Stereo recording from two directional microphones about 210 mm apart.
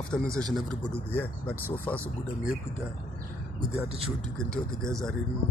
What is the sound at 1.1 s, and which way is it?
Speech, 10° left (ahead or behind).